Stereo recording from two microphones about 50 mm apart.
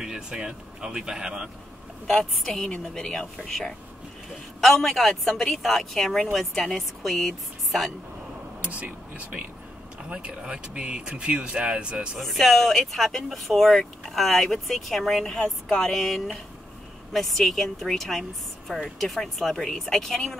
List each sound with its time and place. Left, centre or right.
0.0 s speech: centre
2.0 s a woman's voice: centre
4.6 s speech: centre
8.5 s speech: right
10.0 s speech: right
12.2 s a woman's voice: centre